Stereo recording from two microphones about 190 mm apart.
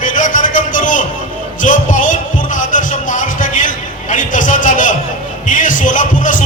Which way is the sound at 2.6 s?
40° left (ahead or behind).